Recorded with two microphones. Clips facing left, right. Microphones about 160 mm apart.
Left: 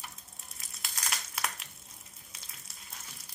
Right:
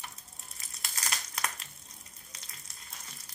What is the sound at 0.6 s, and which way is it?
Crumpling, centre (ahead or behind).